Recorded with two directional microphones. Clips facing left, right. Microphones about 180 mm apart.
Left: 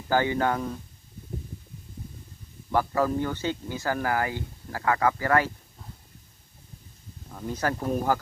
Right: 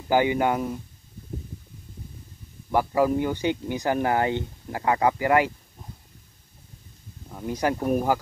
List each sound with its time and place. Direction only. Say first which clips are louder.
0.1 s speech: right 3 dB; 15° right (ahead or behind)
2.7 s speech: right 3 dB; 15° right (ahead or behind)
7.2 s speech: right 3 dB; 10° right (ahead or behind)